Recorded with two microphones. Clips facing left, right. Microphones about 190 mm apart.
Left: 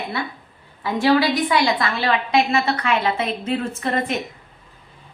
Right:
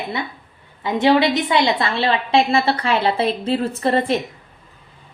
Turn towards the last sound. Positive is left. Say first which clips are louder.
# right 5 dB
turn(degrees=-30)  # may be behind; listen again after turning